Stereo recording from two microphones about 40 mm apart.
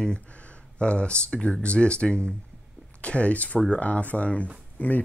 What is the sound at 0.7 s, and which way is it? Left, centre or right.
Speech, left.